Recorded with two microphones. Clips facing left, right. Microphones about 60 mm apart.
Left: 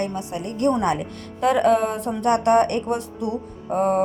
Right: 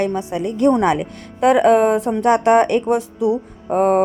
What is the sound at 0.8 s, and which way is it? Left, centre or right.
Speech, right.